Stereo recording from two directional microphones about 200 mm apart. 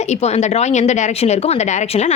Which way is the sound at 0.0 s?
35° left (ahead or behind).